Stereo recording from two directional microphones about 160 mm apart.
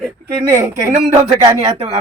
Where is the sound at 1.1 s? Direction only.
40° right (ahead or behind).